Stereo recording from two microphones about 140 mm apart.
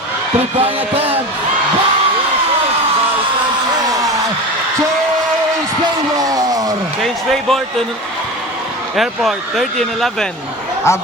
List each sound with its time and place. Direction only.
0.6 s speech: 45° right (ahead or behind)
6.1 s a sound: 25° right (ahead or behind)
9.0 s speech: centre (ahead or behind)
10.9 s speech: 20° left (ahead or behind)